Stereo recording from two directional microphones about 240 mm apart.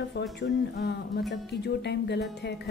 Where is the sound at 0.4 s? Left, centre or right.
Left.